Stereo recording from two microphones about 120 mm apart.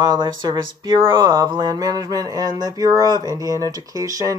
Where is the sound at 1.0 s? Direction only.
30° right (ahead or behind).